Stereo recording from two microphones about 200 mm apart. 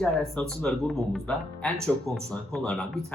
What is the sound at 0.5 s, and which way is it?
Speech, centre (ahead or behind).